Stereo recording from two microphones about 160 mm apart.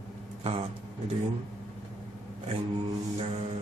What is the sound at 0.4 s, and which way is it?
Vehicle, 35° right (ahead or behind).